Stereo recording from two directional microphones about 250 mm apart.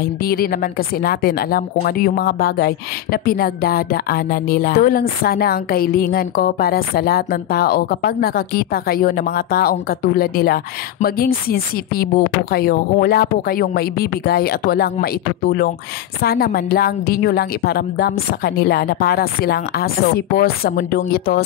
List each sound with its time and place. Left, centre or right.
0.2 s a woman's voice: left